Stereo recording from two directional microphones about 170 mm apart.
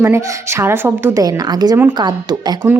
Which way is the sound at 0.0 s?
15° right (ahead or behind).